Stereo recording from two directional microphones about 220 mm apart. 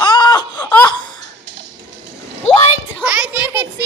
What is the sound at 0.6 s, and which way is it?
Laughter, 10° left (ahead or behind).